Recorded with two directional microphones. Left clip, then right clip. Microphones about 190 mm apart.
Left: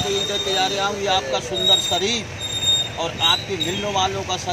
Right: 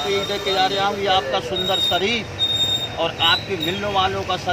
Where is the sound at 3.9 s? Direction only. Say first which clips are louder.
Right 2 dB; 10° right (ahead or behind).